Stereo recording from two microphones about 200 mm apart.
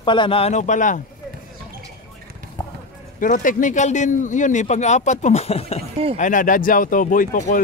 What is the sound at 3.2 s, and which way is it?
A man's voice, 40° left (ahead or behind).